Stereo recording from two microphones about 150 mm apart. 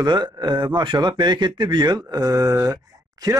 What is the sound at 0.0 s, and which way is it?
A man's voice, 30° right (ahead or behind).